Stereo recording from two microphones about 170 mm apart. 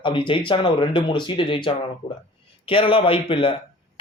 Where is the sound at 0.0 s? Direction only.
30° left (ahead or behind).